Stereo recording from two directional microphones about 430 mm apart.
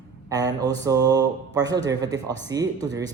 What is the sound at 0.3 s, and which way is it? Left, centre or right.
Speech, centre.